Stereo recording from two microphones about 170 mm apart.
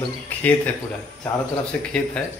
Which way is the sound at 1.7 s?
5° left (ahead or behind).